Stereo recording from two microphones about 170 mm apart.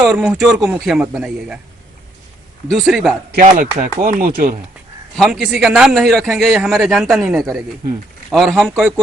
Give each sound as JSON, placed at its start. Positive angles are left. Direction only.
{"t": 0.0, "sound": "a man's voice", "side_deg": -5}
{"t": 2.6, "sound": "a man's voice", "side_deg": 0}
{"t": 3.3, "sound": "speech", "side_deg": -50}
{"t": 5.1, "sound": "a man's voice", "side_deg": 0}